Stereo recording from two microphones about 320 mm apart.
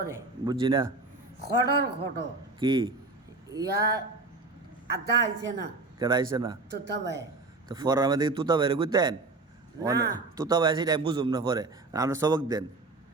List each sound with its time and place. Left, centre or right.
0.1 s a man's voice: centre
1.4 s a man's voice: right
2.6 s a man's voice: centre
3.7 s speech: right
5.0 s a man's voice: right
6.0 s a man's voice: centre
6.8 s a man's voice: right
7.7 s a man's voice: centre